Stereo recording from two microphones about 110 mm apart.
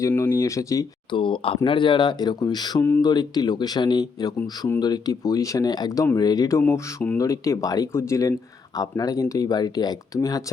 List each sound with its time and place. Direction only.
0.2 s speech: 25° left (ahead or behind)
1.1 s speech: 50° left (ahead or behind); by 7.2 s 20° left (ahead or behind)
7.2 s speech: 30° left (ahead or behind)